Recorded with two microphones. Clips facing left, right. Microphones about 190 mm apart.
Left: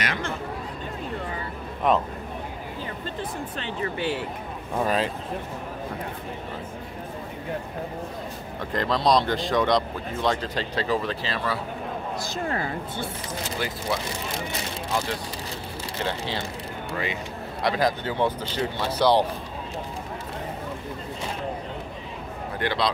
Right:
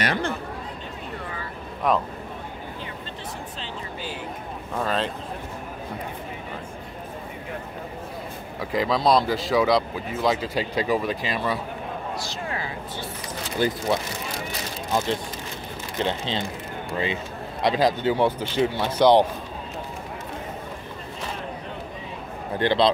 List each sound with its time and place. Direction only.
0.0 s a sound: 35° right (ahead or behind)
3.5 s speech: 60° left (ahead or behind)
4.7 s speech: 10° left (ahead or behind)
8.5 s speech: 5° right (ahead or behind)
12.4 s speech: 50° left (ahead or behind)
13.6 s speech: 25° right (ahead or behind)
16.1 s speech: 20° right (ahead or behind)
22.6 s speech: 25° right (ahead or behind)